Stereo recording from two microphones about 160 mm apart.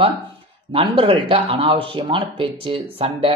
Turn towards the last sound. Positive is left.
turn(degrees=-35)  # may be behind; listen again after turning